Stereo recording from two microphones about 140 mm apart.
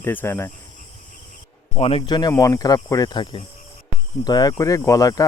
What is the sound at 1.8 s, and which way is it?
Speech, 40° left (ahead or behind).